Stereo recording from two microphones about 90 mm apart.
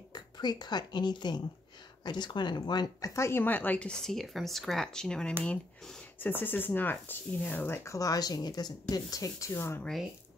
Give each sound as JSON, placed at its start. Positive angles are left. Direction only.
{"t": 0.1, "sound": "speech", "side_deg": 50}
{"t": 3.1, "sound": "speech", "side_deg": 30}
{"t": 6.1, "sound": "speech", "side_deg": 20}